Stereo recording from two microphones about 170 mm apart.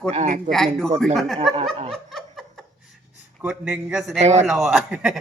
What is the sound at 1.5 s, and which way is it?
Speech, 35° right (ahead or behind).